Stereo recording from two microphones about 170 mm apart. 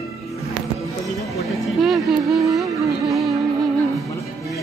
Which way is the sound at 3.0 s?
Centre (ahead or behind).